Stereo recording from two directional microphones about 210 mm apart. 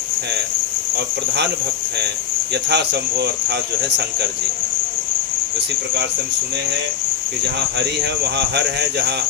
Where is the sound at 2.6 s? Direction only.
50° right (ahead or behind).